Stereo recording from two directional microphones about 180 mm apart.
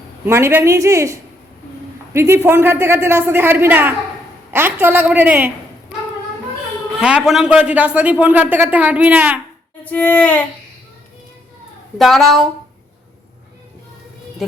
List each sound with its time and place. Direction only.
0.3 s a man's voice: 15° right (ahead or behind)
7.0 s a man's voice: 5° right (ahead or behind)
9.8 s a sound: 10° left (ahead or behind)
11.9 s a woman's voice: centre (ahead or behind)